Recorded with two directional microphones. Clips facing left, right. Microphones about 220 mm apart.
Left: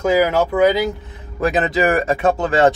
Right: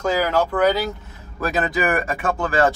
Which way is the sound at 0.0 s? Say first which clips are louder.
Left 4 dB; 10° left (ahead or behind).